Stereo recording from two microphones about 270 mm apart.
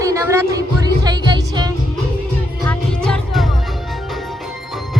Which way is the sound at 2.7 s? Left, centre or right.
Centre.